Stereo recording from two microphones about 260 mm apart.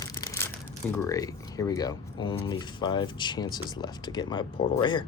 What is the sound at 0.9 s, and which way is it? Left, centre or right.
Speech, centre.